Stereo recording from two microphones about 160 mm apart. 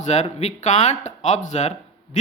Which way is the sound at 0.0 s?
45° left (ahead or behind).